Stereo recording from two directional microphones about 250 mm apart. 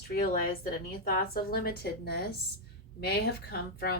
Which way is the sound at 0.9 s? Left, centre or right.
Left.